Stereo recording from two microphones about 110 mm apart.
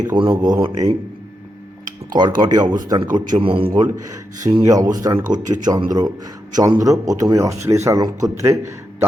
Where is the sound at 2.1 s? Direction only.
40° right (ahead or behind).